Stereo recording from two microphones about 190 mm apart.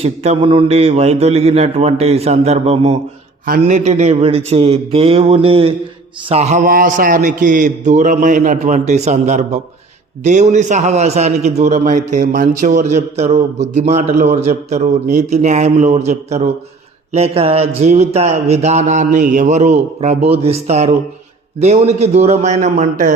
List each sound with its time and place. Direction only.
0.0 s a man's voice: 35° right (ahead or behind)